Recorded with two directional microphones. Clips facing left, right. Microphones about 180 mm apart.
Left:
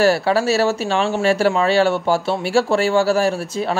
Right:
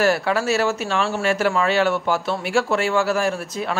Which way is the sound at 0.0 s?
30° left (ahead or behind).